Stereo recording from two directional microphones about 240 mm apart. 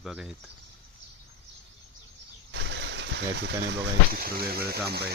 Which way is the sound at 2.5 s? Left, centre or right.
Right.